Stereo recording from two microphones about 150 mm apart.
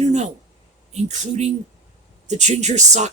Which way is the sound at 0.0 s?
50° right (ahead or behind).